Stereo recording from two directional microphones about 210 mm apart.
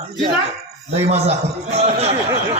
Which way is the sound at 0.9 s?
30° right (ahead or behind).